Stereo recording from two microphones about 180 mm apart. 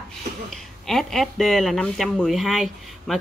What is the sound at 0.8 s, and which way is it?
Speech, centre (ahead or behind).